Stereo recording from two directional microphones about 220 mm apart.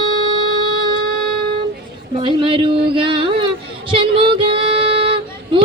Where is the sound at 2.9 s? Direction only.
25° right (ahead or behind).